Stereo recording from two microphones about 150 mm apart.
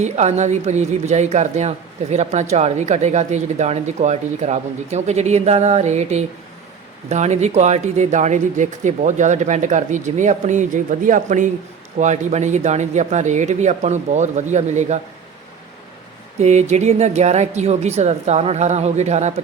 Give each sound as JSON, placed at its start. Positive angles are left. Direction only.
{"t": 0.0, "sound": "speech", "side_deg": -50}
{"t": 16.4, "sound": "speech", "side_deg": -50}